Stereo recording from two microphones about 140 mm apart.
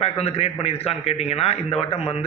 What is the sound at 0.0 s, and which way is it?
A man's voice, 45° left (ahead or behind).